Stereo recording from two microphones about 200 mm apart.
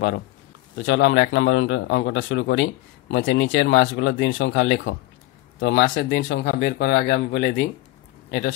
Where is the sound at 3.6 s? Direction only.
55° left (ahead or behind); by 4.3 s 70° left (ahead or behind).